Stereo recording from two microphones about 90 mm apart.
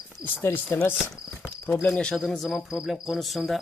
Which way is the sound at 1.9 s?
10° left (ahead or behind).